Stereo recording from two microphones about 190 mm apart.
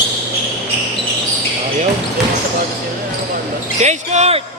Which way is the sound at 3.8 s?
35° right (ahead or behind).